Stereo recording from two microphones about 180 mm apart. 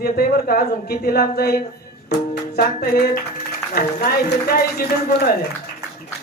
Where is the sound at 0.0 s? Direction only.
55° left (ahead or behind).